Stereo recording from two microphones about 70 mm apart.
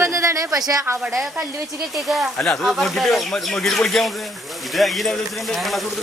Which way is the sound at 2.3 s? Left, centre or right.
Centre.